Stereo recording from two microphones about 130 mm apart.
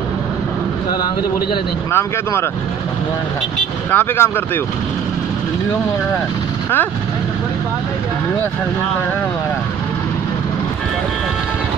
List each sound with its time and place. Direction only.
1.9 s speech: 20° left (ahead or behind)
3.9 s speech: 15° left (ahead or behind)